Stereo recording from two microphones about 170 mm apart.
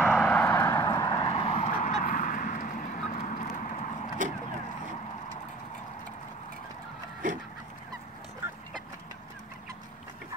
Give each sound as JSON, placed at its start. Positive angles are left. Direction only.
{"t": 0.0, "sound": "vehicle", "side_deg": 10}
{"t": 1.8, "sound": "duck", "side_deg": 45}